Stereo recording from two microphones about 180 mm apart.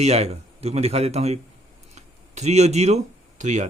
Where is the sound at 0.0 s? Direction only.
35° right (ahead or behind).